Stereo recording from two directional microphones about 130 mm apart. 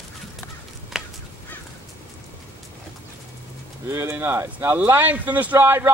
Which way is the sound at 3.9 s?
20° right (ahead or behind).